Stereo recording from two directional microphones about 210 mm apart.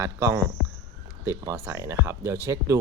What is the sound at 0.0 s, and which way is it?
Speech, 15° right (ahead or behind).